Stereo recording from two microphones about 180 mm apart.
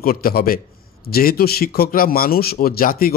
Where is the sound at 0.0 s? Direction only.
55° left (ahead or behind).